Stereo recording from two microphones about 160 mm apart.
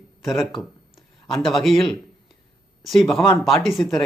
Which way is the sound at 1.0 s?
Centre (ahead or behind).